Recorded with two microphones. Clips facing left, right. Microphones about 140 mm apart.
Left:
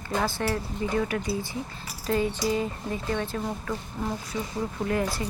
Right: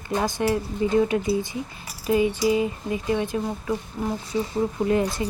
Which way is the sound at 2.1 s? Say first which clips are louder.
Right 5 dB; 10° right (ahead or behind).